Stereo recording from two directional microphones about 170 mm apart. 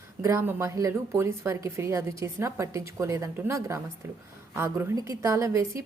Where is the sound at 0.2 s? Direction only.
15° right (ahead or behind).